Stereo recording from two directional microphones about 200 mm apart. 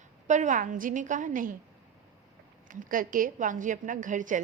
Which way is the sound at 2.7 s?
45° right (ahead or behind).